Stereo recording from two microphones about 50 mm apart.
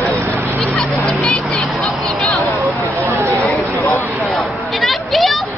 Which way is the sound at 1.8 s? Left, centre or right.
Left.